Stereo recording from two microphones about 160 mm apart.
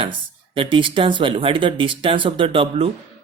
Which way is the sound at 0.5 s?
30° right (ahead or behind).